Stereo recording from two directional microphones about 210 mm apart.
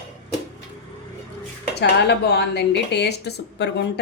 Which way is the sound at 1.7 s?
50° left (ahead or behind).